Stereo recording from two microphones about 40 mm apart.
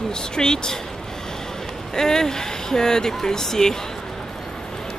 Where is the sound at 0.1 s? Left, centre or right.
Centre.